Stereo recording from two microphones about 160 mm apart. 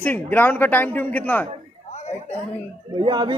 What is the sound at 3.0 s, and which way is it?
Speech, 30° right (ahead or behind).